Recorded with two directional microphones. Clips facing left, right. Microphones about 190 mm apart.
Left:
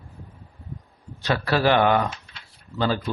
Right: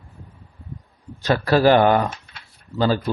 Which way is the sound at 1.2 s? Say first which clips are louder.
Right 5 dB; 45° right (ahead or behind).